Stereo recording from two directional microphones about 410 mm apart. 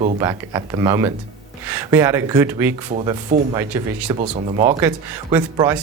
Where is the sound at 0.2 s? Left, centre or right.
Centre.